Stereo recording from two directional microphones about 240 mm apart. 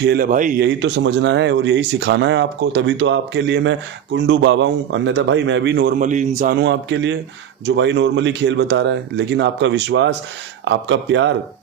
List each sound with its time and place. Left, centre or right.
0.0 s speech: right
0.6 s speech: right